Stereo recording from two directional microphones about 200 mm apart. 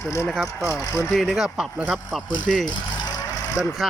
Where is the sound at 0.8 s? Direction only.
15° left (ahead or behind).